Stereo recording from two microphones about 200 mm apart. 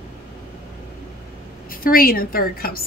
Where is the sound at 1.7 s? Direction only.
45° left (ahead or behind).